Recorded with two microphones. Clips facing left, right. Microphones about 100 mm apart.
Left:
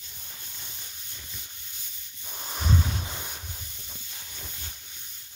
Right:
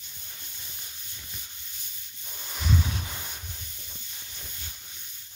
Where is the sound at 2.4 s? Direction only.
35° left (ahead or behind).